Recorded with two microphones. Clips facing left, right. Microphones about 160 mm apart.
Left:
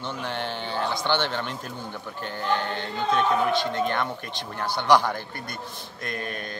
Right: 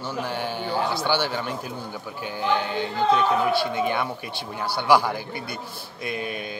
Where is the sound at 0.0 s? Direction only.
5° right (ahead or behind).